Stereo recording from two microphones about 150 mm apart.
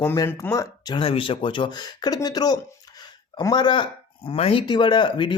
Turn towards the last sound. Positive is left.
turn(degrees=30)  # may be behind; listen again after turning